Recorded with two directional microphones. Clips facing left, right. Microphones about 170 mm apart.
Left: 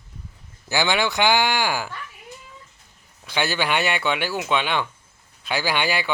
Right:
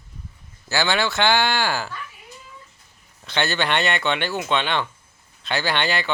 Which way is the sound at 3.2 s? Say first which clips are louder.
Even; 10° left (ahead or behind).